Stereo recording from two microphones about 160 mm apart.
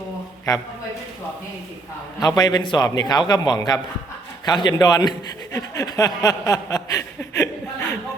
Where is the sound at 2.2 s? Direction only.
25° left (ahead or behind).